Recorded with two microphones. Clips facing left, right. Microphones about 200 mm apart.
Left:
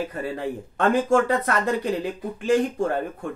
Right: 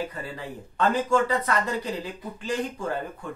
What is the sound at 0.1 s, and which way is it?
Speech, 50° left (ahead or behind).